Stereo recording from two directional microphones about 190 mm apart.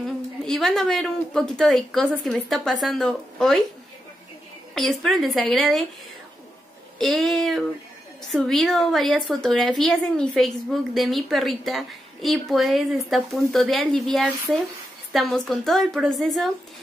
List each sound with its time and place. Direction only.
0.5 s a woman's voice: centre (ahead or behind)
4.7 s a woman's voice: centre (ahead or behind)
7.0 s a woman's voice: centre (ahead or behind)